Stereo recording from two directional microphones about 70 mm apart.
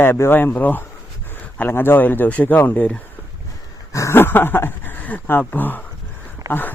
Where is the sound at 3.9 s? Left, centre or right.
Left.